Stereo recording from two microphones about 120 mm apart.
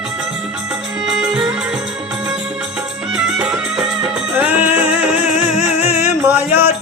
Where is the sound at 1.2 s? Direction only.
5° right (ahead or behind).